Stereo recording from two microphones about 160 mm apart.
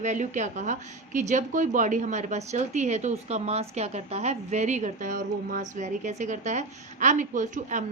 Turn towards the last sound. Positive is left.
turn(degrees=-50)  # may be behind; listen again after turning